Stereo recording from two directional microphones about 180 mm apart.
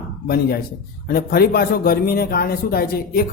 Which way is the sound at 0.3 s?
55° left (ahead or behind).